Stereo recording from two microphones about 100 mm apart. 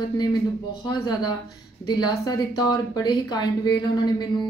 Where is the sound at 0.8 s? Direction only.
45° left (ahead or behind).